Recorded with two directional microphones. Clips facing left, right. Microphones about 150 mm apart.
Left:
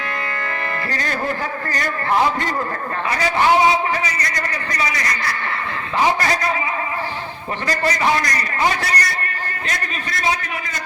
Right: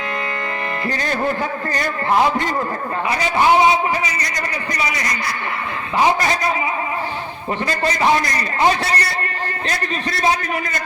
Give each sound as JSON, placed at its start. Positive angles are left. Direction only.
{"t": 0.9, "sound": "a man's voice", "side_deg": -25}
{"t": 3.2, "sound": "a man's voice", "side_deg": -20}
{"t": 7.7, "sound": "a man's voice", "side_deg": -25}